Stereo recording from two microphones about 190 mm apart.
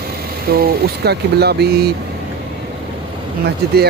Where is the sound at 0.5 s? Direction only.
55° right (ahead or behind).